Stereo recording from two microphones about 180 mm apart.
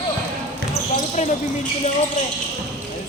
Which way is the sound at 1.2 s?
45° left (ahead or behind).